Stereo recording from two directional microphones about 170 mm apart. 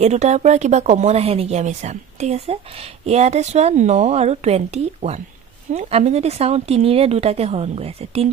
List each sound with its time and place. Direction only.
0.0 s speech: 40° right (ahead or behind)